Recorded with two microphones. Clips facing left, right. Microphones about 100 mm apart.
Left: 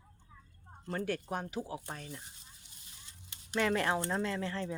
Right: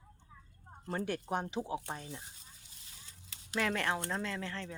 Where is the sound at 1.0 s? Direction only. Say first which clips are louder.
Right 1 dB; 20° right (ahead or behind).